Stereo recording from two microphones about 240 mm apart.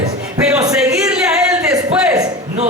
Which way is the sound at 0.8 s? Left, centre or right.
Centre.